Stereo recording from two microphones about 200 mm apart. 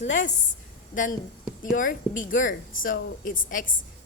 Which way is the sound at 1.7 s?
40° left (ahead or behind).